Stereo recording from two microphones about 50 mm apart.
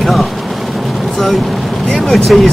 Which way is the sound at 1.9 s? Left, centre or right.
Centre.